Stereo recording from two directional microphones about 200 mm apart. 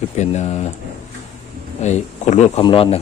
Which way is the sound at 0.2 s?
35° left (ahead or behind).